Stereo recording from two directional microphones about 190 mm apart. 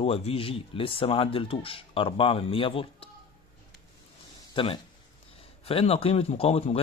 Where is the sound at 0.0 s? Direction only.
30° left (ahead or behind).